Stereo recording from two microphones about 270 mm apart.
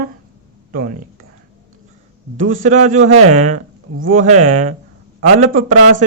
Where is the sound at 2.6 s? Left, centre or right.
Right.